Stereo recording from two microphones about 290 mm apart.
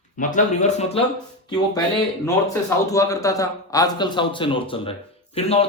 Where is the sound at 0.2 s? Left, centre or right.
Left.